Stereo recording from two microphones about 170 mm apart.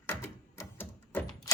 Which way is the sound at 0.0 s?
15° left (ahead or behind).